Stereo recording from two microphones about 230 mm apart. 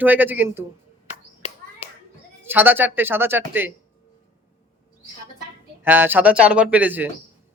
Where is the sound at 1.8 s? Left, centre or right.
Left.